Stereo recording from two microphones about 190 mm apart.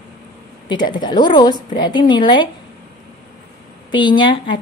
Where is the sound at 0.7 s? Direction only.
25° left (ahead or behind).